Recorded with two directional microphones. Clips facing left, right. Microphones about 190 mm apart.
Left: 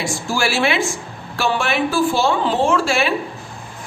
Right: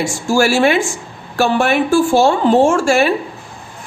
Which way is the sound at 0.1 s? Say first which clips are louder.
Right 7 dB; 45° right (ahead or behind).